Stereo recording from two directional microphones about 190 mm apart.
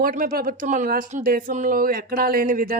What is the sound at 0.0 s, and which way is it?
Speech, 45° right (ahead or behind).